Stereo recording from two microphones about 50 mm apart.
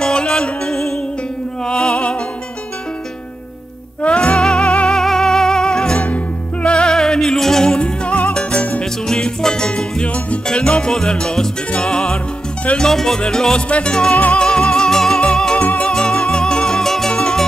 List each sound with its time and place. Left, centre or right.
0.0 s music: centre
4.0 s music: left
6.9 s music: centre; by 14.4 s left
14.4 s music: centre
15.6 s music: left
15.9 s music: centre